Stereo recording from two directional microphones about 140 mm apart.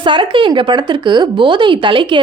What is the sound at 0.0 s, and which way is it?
Speech, 35° right (ahead or behind).